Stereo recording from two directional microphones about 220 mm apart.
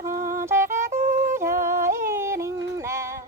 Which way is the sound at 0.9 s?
30° right (ahead or behind).